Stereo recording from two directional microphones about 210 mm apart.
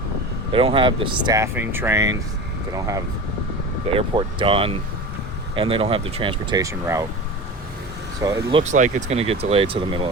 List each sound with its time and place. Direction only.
0.5 s speech: 25° right (ahead or behind)
8.2 s speech: 20° right (ahead or behind)